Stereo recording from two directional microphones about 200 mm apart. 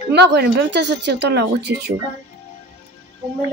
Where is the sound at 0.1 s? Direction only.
60° right (ahead or behind).